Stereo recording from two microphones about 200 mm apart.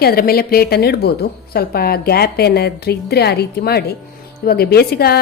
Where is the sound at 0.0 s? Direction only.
50° left (ahead or behind).